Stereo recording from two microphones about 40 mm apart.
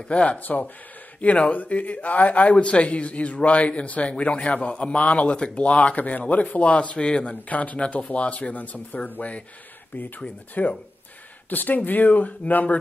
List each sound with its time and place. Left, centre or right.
0.1 s speech: left
0.4 s a man's voice: left
7.4 s a man's voice: left
10.6 s a man's voice: left
11.5 s speech: left